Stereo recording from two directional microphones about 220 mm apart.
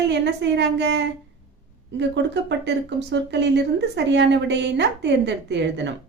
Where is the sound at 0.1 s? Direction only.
50° right (ahead or behind).